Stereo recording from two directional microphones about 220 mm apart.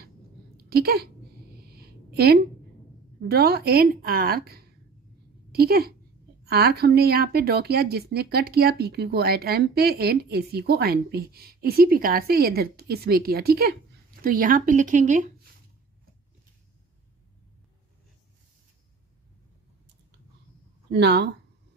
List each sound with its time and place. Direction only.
0.7 s speech: 45° right (ahead or behind)
1.7 s a sound: 45° right (ahead or behind)
3.2 s a woman's voice: 45° right (ahead or behind)
20.9 s a woman's voice: 50° right (ahead or behind)